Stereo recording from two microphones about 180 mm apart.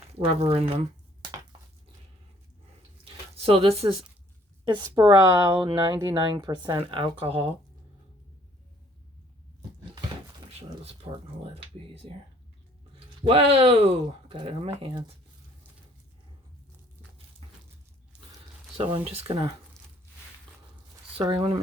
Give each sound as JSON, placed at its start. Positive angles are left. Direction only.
{"t": 0.1, "sound": "speech", "side_deg": -35}
{"t": 3.0, "sound": "a sound", "side_deg": -30}
{"t": 4.6, "sound": "speech", "side_deg": -25}
{"t": 13.2, "sound": "speech", "side_deg": -30}
{"t": 18.8, "sound": "speech", "side_deg": -30}
{"t": 21.2, "sound": "speech", "side_deg": -30}